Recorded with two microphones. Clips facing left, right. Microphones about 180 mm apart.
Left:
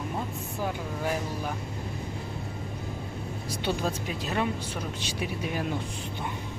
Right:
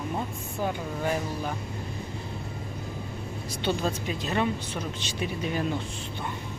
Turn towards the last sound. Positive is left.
turn(degrees=10)  # may be behind; listen again after turning